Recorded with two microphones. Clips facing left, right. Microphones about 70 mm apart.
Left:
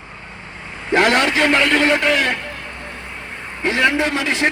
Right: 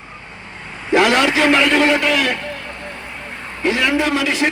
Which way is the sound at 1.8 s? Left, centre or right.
Left.